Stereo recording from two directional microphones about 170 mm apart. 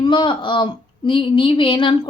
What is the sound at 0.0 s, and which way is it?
A woman's voice, 25° left (ahead or behind).